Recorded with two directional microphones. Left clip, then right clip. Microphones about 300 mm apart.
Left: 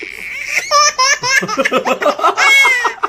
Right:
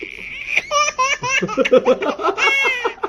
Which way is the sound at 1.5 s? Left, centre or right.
Centre.